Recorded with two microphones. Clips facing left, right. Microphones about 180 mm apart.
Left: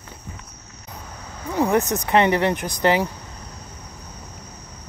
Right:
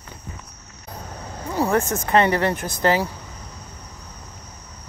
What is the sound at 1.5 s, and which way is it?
Speech, 15° left (ahead or behind).